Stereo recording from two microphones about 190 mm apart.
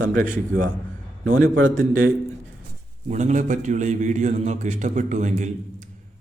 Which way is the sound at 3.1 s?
40° right (ahead or behind).